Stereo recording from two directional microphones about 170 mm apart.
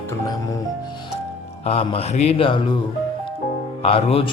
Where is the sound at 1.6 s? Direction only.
35° left (ahead or behind).